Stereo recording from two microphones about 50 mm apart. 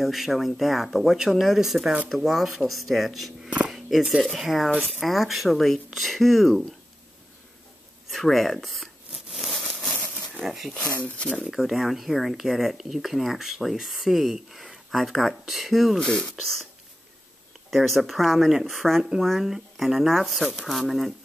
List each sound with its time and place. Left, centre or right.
0.0 s speech: centre
3.4 s a sound: right
3.7 s a sound: centre
4.2 s speech: centre
8.1 s a sound: centre
10.4 s speech: centre
10.7 s speech: left
11.5 s speech: centre
16.0 s speech: centre
17.6 s speech: centre